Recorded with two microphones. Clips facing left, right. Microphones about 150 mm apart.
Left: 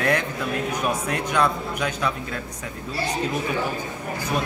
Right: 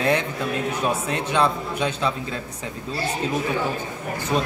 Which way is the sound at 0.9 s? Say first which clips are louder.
Right 1 dB; 30° right (ahead or behind).